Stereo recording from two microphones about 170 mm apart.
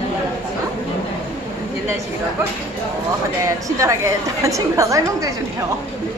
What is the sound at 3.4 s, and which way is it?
A woman's voice, 20° right (ahead or behind).